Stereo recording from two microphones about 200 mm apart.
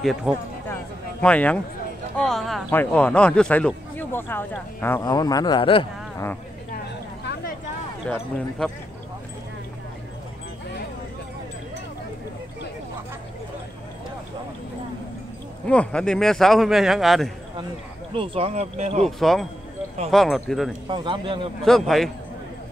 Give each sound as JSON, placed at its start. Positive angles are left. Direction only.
{"t": 0.0, "sound": "a man's voice", "side_deg": 0}
{"t": 8.1, "sound": "speech", "side_deg": 10}
{"t": 15.6, "sound": "a man's voice", "side_deg": 5}
{"t": 18.1, "sound": "speech", "side_deg": -25}
{"t": 19.0, "sound": "a man's voice", "side_deg": 0}
{"t": 20.9, "sound": "speech", "side_deg": -25}
{"t": 21.6, "sound": "a man's voice", "side_deg": 0}